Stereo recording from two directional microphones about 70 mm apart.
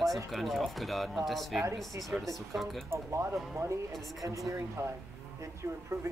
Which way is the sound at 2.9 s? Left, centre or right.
Right.